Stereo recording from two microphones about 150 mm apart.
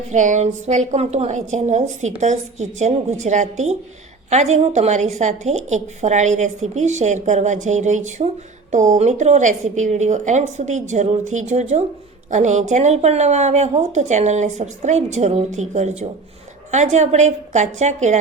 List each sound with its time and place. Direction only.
0.1 s a woman's voice: 55° right (ahead or behind)